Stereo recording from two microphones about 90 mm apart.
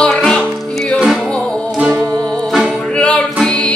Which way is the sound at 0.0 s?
10° left (ahead or behind).